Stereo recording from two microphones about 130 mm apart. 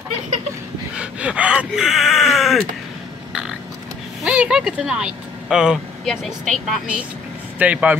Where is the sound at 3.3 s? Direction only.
5° right (ahead or behind).